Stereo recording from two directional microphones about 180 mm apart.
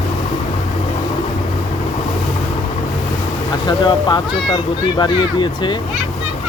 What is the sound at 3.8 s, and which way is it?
Speech, 25° left (ahead or behind).